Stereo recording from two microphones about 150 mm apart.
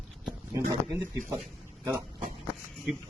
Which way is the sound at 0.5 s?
15° right (ahead or behind).